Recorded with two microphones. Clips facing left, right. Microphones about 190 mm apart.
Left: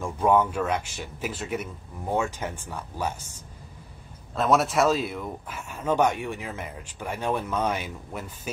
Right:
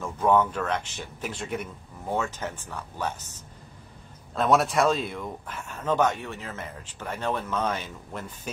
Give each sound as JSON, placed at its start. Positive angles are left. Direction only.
{"t": 0.0, "sound": "speech", "side_deg": 10}
{"t": 4.4, "sound": "speech", "side_deg": 0}